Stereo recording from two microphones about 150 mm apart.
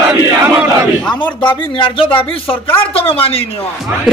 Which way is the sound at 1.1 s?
30° left (ahead or behind).